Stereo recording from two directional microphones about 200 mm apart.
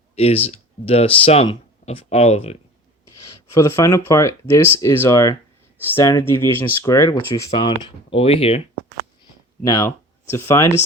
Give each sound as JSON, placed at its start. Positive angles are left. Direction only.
{"t": 0.2, "sound": "speech", "side_deg": 30}
{"t": 3.5, "sound": "speech", "side_deg": 15}
{"t": 9.6, "sound": "speech", "side_deg": 15}